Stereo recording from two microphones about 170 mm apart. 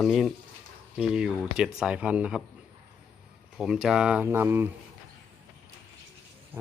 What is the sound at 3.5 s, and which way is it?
Speech, centre (ahead or behind).